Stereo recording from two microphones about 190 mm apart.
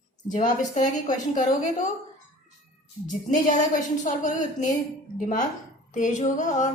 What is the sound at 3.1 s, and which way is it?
A woman's voice, 40° left (ahead or behind).